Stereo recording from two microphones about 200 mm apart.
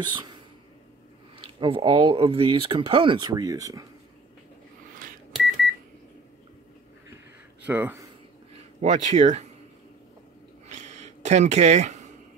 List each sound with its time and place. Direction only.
0.0 s speech: 20° right (ahead or behind)
1.6 s speech: 25° right (ahead or behind)
7.6 s speech: 10° right (ahead or behind)
8.8 s speech: 35° right (ahead or behind)
10.7 s a sound: 35° right (ahead or behind)